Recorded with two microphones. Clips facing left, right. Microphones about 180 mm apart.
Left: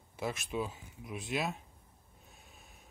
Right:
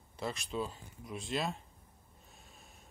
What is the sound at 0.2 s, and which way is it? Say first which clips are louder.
Speech: left 1 dB; 10° left (ahead or behind).